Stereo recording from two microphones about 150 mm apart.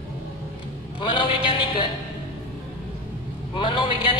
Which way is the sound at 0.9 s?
35° left (ahead or behind).